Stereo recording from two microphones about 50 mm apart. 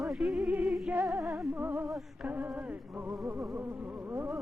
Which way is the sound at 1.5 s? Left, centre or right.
Right.